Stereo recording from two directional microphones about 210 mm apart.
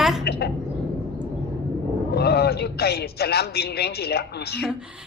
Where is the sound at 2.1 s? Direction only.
50° left (ahead or behind).